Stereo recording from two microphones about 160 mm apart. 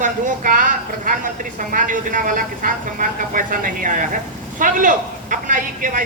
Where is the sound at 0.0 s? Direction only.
55° right (ahead or behind).